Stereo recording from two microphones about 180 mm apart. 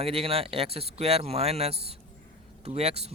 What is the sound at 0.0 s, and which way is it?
Speech, 30° right (ahead or behind).